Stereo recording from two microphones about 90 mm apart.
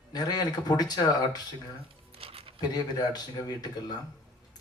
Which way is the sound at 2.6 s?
50° left (ahead or behind).